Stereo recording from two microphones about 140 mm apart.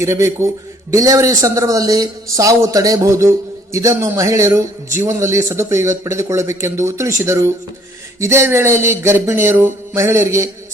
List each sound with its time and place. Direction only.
0.0 s a man's voice: 20° right (ahead or behind)